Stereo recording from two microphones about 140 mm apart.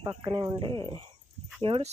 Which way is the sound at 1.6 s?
40° right (ahead or behind).